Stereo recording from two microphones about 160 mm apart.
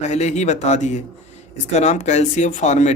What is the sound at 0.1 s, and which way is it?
Speech, 45° left (ahead or behind).